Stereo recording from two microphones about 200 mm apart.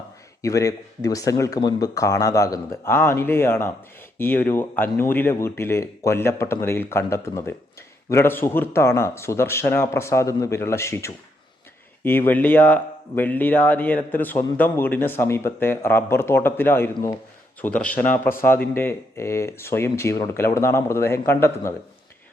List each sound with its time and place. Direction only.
0.4 s speech: 15° left (ahead or behind)